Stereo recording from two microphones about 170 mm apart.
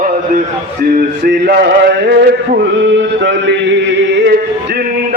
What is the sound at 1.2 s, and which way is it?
Male singing, 75° right (ahead or behind).